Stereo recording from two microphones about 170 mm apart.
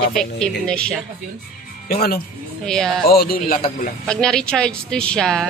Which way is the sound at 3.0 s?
65° left (ahead or behind).